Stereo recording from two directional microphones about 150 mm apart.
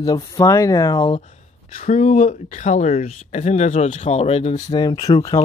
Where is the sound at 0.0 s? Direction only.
25° left (ahead or behind).